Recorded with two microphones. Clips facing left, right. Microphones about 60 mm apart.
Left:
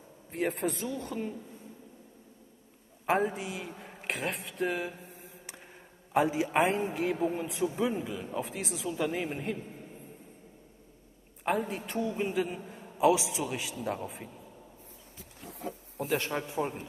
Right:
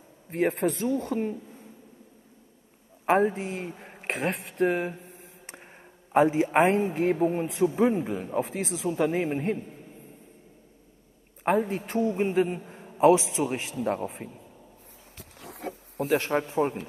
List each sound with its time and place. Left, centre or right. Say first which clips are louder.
0.3 s a man's voice: right 6 dB; right
3.1 s a man's voice: right 6 dB; right
6.1 s a man's voice: right 5 dB; right
11.5 s a man's voice: right 7 dB; right
15.1 s a sound: right 3 dB; right
16.2 s a man's voice: right 7 dB; right